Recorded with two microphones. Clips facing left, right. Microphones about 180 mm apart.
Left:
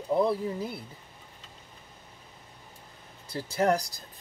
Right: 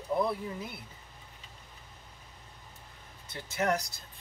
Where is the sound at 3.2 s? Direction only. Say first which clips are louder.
Left 5 dB; 35° left (ahead or behind).